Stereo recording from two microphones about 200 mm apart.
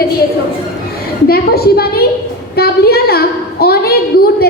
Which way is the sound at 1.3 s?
50° left (ahead or behind).